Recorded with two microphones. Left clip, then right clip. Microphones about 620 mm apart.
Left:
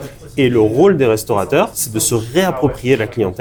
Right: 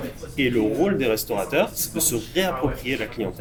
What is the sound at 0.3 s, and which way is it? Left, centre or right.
Speech, left.